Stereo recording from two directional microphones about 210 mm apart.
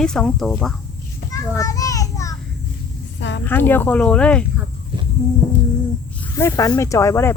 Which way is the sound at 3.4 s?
10° left (ahead or behind).